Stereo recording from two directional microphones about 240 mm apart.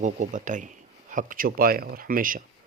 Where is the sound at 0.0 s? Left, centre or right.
Right.